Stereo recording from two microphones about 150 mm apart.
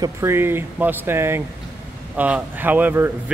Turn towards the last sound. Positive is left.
turn(degrees=-15)  # may be behind; listen again after turning